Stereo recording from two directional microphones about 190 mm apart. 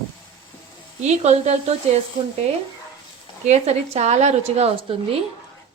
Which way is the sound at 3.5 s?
35° right (ahead or behind).